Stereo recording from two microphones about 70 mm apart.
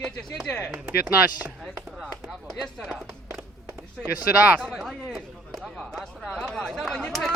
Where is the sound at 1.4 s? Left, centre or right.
Right.